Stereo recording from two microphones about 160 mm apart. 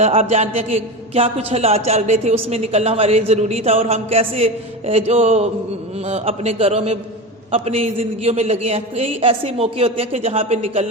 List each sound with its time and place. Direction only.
0.0 s a man's voice: 40° right (ahead or behind)